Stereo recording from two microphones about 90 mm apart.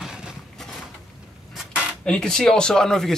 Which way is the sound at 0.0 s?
10° right (ahead or behind).